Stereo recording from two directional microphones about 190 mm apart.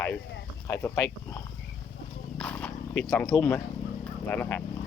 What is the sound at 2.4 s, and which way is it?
Zipper, 5° left (ahead or behind).